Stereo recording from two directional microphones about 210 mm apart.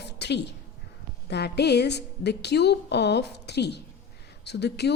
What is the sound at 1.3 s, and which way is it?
Speech, 50° left (ahead or behind).